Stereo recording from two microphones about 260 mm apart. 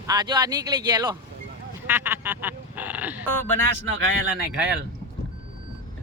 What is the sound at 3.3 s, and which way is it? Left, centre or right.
Speech, centre.